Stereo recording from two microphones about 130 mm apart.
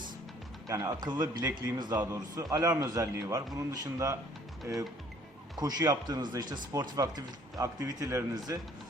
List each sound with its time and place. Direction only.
0.7 s speech: 25° right (ahead or behind)
5.5 s speech: 30° right (ahead or behind)